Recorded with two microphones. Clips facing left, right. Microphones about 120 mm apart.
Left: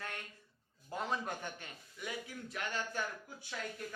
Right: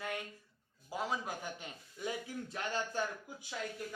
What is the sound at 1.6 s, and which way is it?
Speech, 25° right (ahead or behind).